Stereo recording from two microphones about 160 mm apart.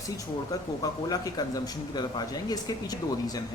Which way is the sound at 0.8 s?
25° left (ahead or behind).